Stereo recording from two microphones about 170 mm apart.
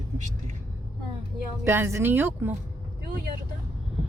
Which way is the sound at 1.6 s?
15° right (ahead or behind).